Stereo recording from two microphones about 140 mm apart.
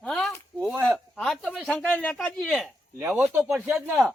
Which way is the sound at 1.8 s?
10° left (ahead or behind).